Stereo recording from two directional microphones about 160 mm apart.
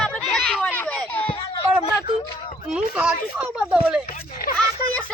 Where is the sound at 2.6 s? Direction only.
5° right (ahead or behind).